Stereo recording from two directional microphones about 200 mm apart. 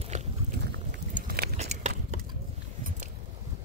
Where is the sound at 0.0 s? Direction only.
35° right (ahead or behind).